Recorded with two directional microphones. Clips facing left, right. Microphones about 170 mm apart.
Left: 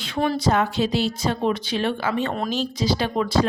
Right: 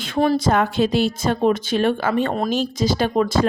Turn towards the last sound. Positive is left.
turn(degrees=-45)  # may be behind; listen again after turning